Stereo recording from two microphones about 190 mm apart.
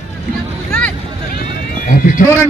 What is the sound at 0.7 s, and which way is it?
Vehicle, 5° left (ahead or behind).